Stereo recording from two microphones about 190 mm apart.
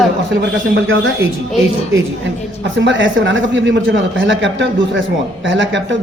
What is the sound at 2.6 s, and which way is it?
Speech, 80° right.